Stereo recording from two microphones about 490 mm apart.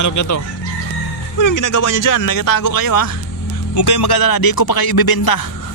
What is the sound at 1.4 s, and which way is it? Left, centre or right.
Speech, left.